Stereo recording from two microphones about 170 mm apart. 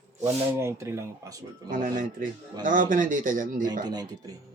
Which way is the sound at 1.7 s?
50° right (ahead or behind).